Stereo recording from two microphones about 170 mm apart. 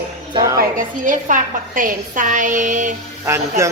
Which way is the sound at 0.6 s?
50° right (ahead or behind).